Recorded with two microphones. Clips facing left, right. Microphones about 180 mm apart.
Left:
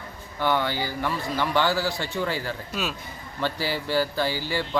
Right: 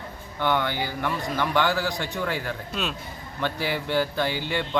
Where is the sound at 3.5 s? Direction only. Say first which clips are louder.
Even; 60° right (ahead or behind).